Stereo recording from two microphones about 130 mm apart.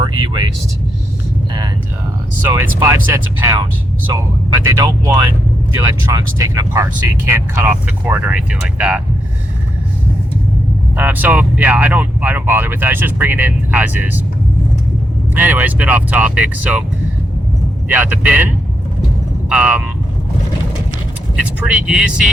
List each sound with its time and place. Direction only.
0.0 s speech: 35° right (ahead or behind)
2.8 s speech: 20° right (ahead or behind)
10.9 s speech: 15° right (ahead or behind)
15.4 s speech: 15° right (ahead or behind)
17.8 s speech: 15° right (ahead or behind)
21.6 s speech: 10° right (ahead or behind)